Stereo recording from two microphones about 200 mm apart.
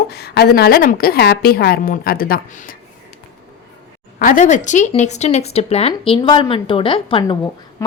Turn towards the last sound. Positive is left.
turn(degrees=15)  # may be behind; listen again after turning